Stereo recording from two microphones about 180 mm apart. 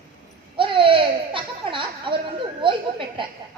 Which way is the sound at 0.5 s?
30° right (ahead or behind).